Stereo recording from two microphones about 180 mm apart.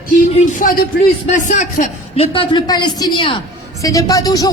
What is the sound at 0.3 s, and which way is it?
A man's voice, 45° left (ahead or behind).